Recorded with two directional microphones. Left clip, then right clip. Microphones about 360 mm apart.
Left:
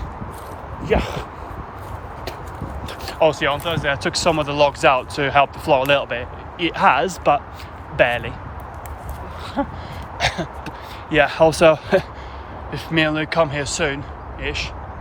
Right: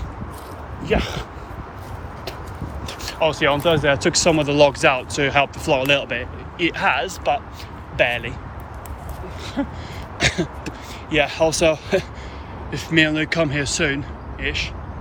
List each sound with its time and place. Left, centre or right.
0.9 s speech: left
2.8 s speech: centre
10.2 s a sound: centre
11.2 s speech: centre